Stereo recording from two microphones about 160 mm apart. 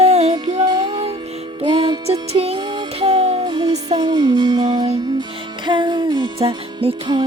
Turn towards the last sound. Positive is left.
turn(degrees=-30)  # may be behind; listen again after turning